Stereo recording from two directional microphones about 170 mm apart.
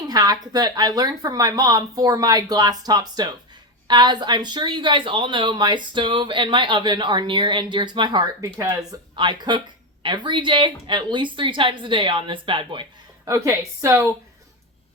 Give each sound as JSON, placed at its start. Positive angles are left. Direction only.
{"t": 0.1, "sound": "speech", "side_deg": -20}
{"t": 13.2, "sound": "a woman's voice", "side_deg": -20}